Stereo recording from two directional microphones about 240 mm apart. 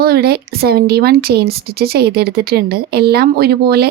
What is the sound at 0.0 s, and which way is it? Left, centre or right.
A woman's voice, right.